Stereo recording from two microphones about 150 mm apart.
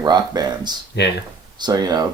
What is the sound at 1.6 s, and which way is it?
Speech, 25° right (ahead or behind).